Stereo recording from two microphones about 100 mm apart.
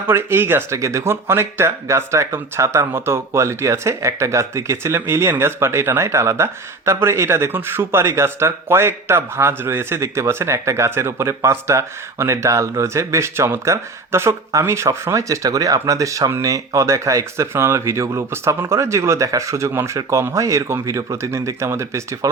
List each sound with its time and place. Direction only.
0.1 s speech: 25° right (ahead or behind)